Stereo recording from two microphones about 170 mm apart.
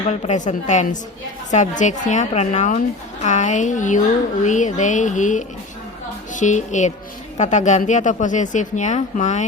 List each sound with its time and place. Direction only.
0.1 s speech: 45° left (ahead or behind)